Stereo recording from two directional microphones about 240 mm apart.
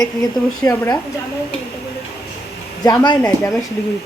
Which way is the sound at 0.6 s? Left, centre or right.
Centre.